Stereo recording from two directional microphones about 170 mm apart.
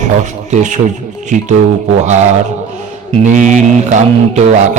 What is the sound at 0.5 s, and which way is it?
Speech, 45° right (ahead or behind).